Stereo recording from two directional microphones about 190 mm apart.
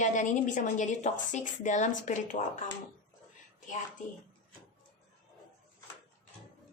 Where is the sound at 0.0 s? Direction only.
40° left (ahead or behind).